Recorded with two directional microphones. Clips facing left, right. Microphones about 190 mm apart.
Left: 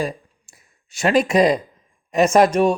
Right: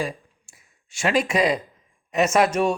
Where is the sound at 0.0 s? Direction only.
40° left (ahead or behind).